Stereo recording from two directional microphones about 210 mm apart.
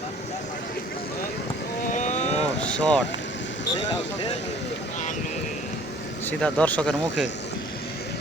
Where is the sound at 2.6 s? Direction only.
5° left (ahead or behind).